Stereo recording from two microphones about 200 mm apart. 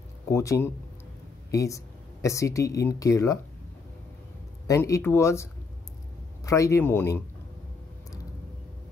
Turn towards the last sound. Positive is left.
turn(degrees=10)  # may be behind; listen again after turning